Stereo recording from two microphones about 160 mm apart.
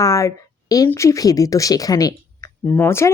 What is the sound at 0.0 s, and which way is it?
Speech, 20° left (ahead or behind).